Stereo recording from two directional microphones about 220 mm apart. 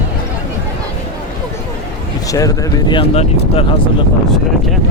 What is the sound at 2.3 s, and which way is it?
Speech, 15° left (ahead or behind).